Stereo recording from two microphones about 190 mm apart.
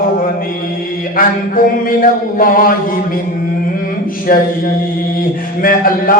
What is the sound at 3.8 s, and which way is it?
Mantra, 50° left (ahead or behind).